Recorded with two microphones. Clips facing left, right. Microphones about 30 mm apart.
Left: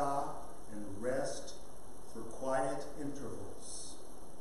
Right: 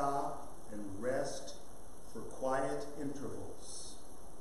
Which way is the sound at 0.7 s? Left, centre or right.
Centre.